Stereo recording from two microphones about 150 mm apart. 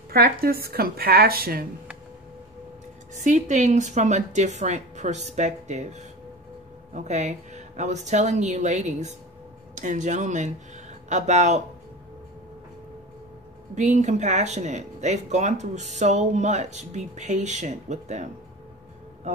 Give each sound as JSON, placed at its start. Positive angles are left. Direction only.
{"t": 0.1, "sound": "speech", "side_deg": -90}
{"t": 3.2, "sound": "speech", "side_deg": -55}
{"t": 13.7, "sound": "speech", "side_deg": -50}